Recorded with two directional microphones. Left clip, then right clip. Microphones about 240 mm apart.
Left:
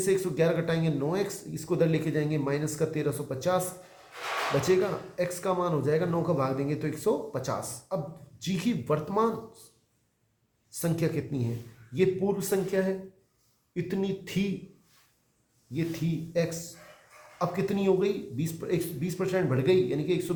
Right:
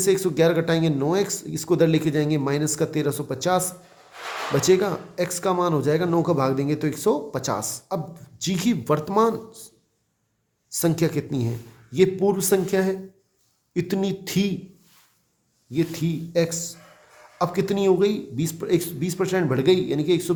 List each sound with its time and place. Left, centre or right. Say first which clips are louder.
0.0 s speech: right 6 dB; right
4.6 s speech: right 6 dB; right
10.7 s speech: right 7 dB; right
15.7 s speech: right 7 dB; right